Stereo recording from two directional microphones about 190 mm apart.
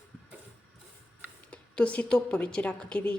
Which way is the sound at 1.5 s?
5° left (ahead or behind).